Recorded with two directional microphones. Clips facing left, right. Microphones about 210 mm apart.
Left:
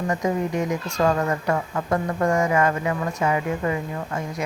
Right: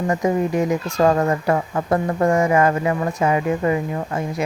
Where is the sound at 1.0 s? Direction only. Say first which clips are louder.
Right 4 dB; 35° right (ahead or behind).